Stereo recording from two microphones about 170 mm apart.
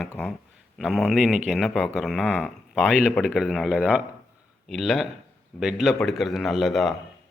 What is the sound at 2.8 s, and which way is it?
A man's voice, 5° right (ahead or behind).